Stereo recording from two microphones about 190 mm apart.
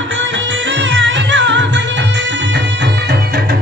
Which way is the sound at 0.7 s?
75° right (ahead or behind).